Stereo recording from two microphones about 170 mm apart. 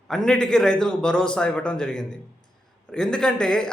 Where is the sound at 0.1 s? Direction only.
5° left (ahead or behind).